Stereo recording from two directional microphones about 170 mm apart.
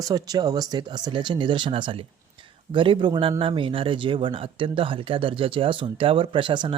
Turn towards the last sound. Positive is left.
turn(degrees=-30)  # may be behind; listen again after turning